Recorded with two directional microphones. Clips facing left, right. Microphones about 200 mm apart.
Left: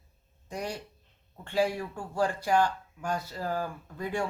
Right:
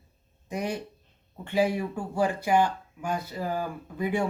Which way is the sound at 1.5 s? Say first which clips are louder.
Right 3 dB; 20° right (ahead or behind).